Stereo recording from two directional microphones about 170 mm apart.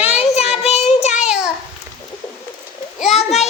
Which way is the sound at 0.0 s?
40° left (ahead or behind).